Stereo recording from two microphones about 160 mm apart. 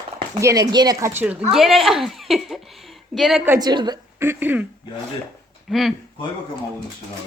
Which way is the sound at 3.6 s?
25° right (ahead or behind).